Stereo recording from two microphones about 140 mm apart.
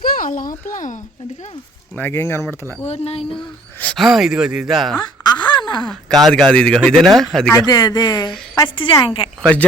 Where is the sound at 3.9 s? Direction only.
Centre (ahead or behind).